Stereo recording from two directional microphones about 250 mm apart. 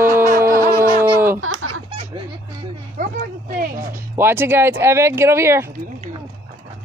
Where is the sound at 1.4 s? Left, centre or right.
Right.